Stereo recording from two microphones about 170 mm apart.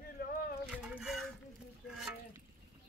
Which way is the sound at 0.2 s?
70° left (ahead or behind).